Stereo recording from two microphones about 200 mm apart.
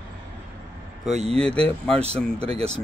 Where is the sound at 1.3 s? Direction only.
5° left (ahead or behind).